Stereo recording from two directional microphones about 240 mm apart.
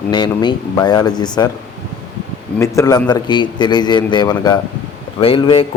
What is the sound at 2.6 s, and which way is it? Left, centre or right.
A man's voice, centre.